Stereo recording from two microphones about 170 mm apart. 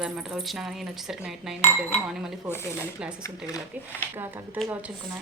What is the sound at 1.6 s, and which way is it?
Cutlery, 40° left (ahead or behind).